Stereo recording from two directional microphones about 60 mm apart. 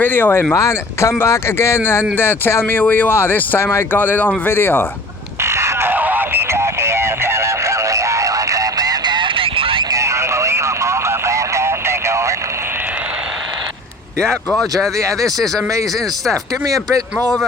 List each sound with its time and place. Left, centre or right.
0.0 s speech: left
0.5 s speech: left
2.8 s speech: left
3.1 s speech: left
5.4 s crow: right
5.9 s radio: right
6.5 s a sound: right
9.9 s a sound: right
14.2 s speech: centre
14.9 s speech: right
16.6 s speech: right